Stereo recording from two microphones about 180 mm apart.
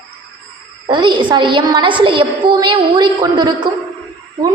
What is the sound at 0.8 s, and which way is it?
A woman's voice, 25° right (ahead or behind).